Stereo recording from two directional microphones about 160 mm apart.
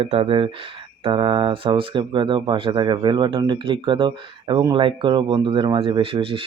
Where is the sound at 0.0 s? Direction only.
35° right (ahead or behind).